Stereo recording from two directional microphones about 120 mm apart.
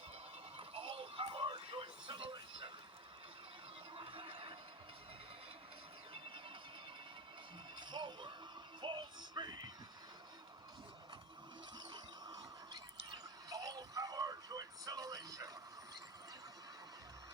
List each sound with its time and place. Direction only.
0.5 s music: 50° right (ahead or behind)
3.9 s squeal: 50° right (ahead or behind)
7.8 s music: 40° right (ahead or behind)
11.9 s a sound: 35° right (ahead or behind)
13.5 s music: 30° right (ahead or behind)